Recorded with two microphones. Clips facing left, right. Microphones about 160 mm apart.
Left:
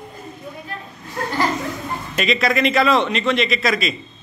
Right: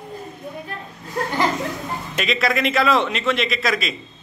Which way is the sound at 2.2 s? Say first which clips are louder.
Left 3 dB; centre (ahead or behind).